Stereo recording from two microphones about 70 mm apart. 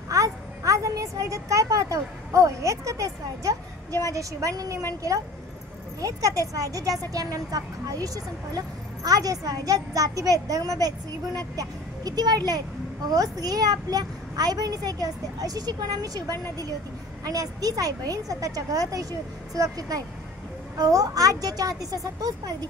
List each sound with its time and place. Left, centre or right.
0.1 s a sound: right
4.1 s a woman's voice: right
5.9 s a child's voice: right